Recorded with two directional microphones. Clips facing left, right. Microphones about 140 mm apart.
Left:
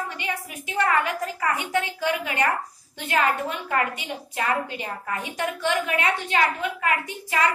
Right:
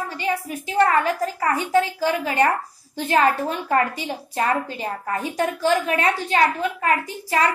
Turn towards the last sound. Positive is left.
turn(degrees=-35)  # may be behind; listen again after turning